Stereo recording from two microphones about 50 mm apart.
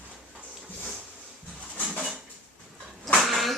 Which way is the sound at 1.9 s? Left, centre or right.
Centre.